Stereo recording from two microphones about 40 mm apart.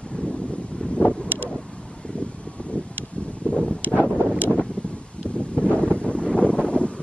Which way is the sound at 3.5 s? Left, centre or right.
Left.